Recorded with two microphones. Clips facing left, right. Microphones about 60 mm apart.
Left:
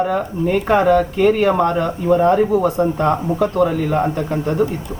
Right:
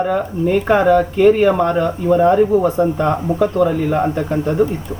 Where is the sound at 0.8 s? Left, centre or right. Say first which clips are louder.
Even; centre.